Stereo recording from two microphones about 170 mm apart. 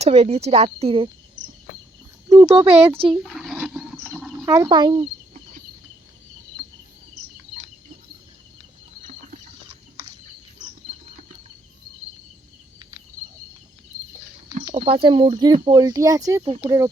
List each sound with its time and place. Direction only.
0.0 s speech: 35° right (ahead or behind)
2.5 s speech: 35° right (ahead or behind)
3.1 s a sound: centre (ahead or behind)
4.4 s speech: 20° right (ahead or behind)
14.6 s speech: 35° right (ahead or behind)